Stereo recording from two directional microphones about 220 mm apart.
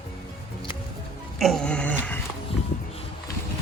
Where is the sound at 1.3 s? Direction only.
Centre (ahead or behind).